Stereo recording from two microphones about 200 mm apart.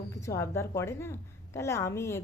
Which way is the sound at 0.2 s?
15° left (ahead or behind).